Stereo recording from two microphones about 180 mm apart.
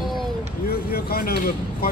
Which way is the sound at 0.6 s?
60° left (ahead or behind).